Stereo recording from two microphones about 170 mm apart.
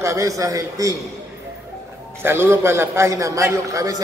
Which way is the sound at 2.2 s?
15° right (ahead or behind).